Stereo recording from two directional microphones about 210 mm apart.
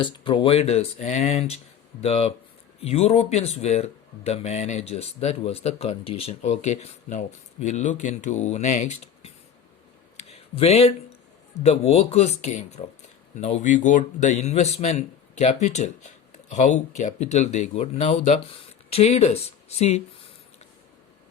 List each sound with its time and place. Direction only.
0.0 s speech: 25° left (ahead or behind)
10.2 s a sound: 30° left (ahead or behind)
11.6 s speech: 30° left (ahead or behind)